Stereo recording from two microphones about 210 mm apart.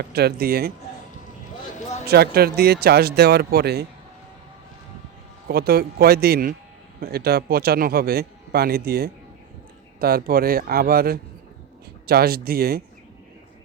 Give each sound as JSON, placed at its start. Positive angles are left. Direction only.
{"t": 0.1, "sound": "a man's voice", "side_deg": -50}
{"t": 1.8, "sound": "a sound", "side_deg": 35}
{"t": 2.0, "sound": "a man's voice", "side_deg": -50}
{"t": 5.5, "sound": "a man's voice", "side_deg": -45}